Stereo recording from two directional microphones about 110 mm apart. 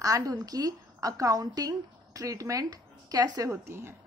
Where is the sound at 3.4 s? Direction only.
25° right (ahead or behind).